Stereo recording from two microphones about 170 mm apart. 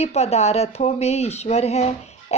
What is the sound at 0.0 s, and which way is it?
A woman's voice, 40° left (ahead or behind).